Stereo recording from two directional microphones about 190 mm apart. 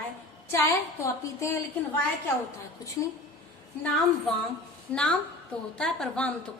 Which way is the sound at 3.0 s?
15° left (ahead or behind).